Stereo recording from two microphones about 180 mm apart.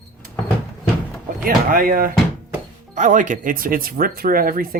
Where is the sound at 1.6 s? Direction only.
50° right (ahead or behind).